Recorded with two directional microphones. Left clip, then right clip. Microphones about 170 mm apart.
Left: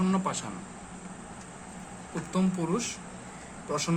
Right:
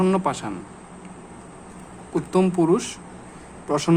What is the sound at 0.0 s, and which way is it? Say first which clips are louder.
Speech: right 9 dB; 40° right (ahead or behind).